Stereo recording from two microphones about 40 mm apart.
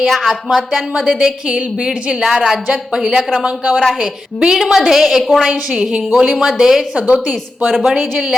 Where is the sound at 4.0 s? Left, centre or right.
Centre.